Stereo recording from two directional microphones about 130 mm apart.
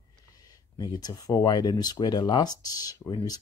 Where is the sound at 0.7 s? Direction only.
30° left (ahead or behind).